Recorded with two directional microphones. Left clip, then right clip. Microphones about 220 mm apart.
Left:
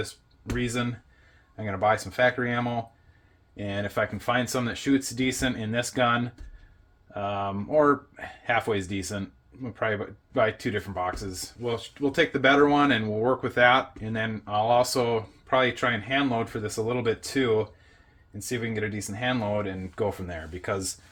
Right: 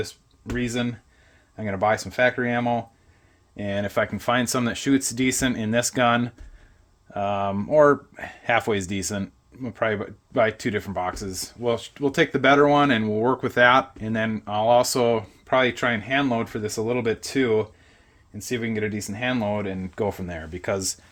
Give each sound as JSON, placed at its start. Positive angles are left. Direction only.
{"t": 0.5, "sound": "speech", "side_deg": -40}